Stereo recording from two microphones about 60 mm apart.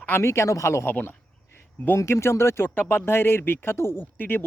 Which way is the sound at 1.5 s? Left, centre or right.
Left.